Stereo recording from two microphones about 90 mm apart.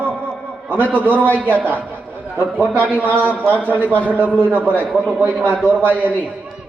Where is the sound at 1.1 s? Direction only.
20° left (ahead or behind).